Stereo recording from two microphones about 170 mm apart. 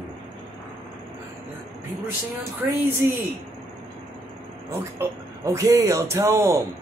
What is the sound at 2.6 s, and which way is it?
Speech, 10° right (ahead or behind).